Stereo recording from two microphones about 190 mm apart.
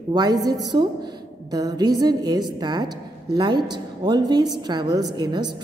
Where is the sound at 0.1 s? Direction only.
20° right (ahead or behind).